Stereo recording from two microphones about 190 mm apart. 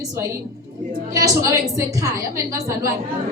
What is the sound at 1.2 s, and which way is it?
A woman's voice, 15° right (ahead or behind).